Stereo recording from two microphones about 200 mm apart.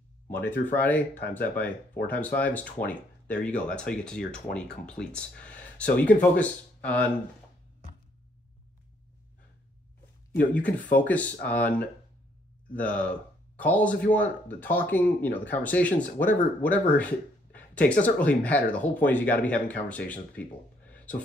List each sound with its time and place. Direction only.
0.3 s speech: 10° left (ahead or behind)
2.0 s speech: 10° left (ahead or behind)
10.3 s speech: 5° left (ahead or behind)
12.7 s speech: 5° left (ahead or behind)